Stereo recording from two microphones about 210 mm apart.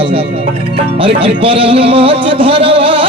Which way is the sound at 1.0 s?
25° right (ahead or behind).